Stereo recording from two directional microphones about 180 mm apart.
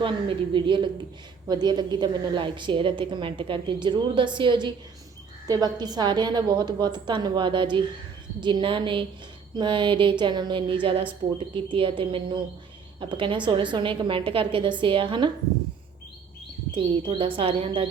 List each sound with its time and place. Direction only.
0.0 s a woman's voice: 30° right (ahead or behind)
16.7 s a woman's voice: 30° right (ahead or behind)